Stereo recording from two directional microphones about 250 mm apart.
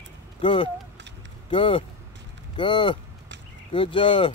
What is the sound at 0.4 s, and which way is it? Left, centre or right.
Speech, left.